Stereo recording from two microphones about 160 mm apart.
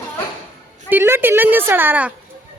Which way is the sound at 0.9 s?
15° right (ahead or behind).